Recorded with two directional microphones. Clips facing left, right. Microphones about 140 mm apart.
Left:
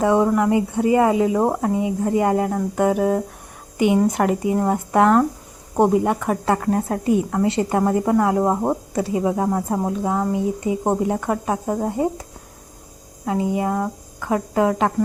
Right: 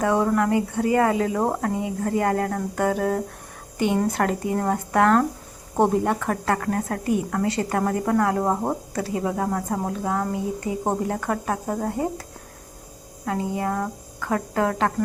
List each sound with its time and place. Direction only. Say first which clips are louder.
0.0 s a woman's voice: left 4 dB; 20° left (ahead or behind)
13.2 s speech: left 4 dB; 15° left (ahead or behind)